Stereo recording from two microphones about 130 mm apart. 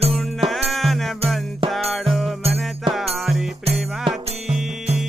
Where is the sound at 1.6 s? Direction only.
45° right (ahead or behind).